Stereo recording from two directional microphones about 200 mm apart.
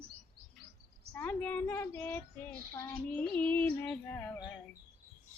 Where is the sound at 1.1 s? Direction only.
10° left (ahead or behind).